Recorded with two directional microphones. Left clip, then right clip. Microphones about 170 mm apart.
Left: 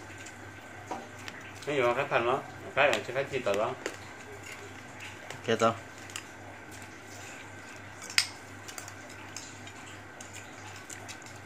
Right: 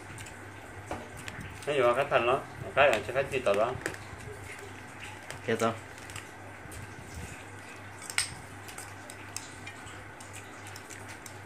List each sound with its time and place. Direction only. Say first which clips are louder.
1.7 s speech: right 2 dB; 15° left (ahead or behind)
5.5 s speech: left 3 dB; 10° left (ahead or behind)